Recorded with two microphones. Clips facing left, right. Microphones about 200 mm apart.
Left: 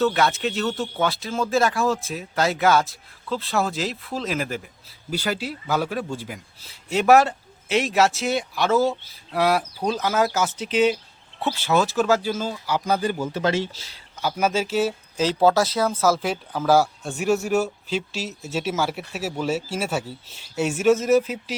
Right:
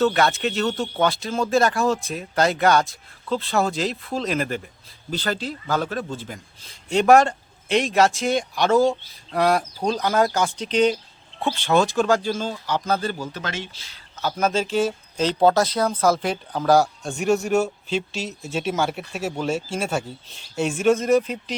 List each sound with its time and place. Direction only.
0.0 s a man's voice: centre (ahead or behind); by 14.0 s 30° left (ahead or behind)
14.2 s a man's voice: 10° left (ahead or behind)